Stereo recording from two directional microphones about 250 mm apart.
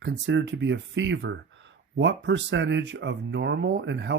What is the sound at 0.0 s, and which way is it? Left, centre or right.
Speech, right.